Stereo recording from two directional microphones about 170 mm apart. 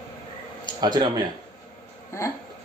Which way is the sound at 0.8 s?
25° right (ahead or behind).